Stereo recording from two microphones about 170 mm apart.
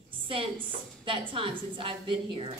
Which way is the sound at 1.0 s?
30° right (ahead or behind).